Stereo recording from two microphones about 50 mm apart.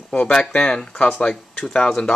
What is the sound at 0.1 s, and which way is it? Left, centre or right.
Speech, left.